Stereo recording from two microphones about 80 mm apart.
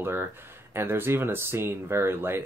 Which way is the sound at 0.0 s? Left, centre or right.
Right.